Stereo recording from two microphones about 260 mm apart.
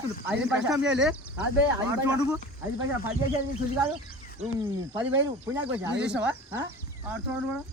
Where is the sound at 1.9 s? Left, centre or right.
Centre.